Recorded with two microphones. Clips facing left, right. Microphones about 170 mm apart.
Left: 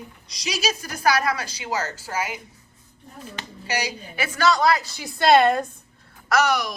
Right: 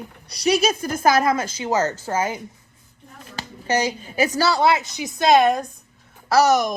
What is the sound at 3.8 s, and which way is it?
A woman's voice, 40° right (ahead or behind).